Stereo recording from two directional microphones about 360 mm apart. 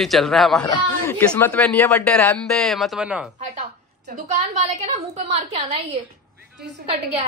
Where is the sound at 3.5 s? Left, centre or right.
Centre.